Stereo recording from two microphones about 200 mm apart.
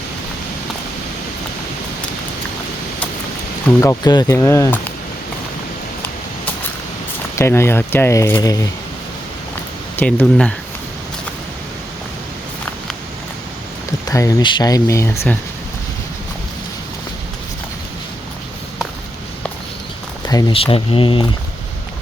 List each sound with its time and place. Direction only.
3.8 s speech: 15° left (ahead or behind)
7.3 s speech: 10° left (ahead or behind)
9.9 s speech: 10° left (ahead or behind)
14.1 s speech: 15° left (ahead or behind)
20.2 s speech: 25° left (ahead or behind)